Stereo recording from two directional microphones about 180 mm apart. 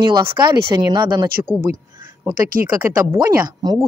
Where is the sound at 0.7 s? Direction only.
20° right (ahead or behind).